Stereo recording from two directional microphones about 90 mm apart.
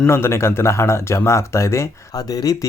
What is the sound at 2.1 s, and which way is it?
Speech, 45° left (ahead or behind).